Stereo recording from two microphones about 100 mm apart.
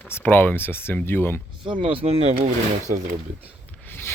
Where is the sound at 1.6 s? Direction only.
55° right (ahead or behind); by 2.4 s 90° right.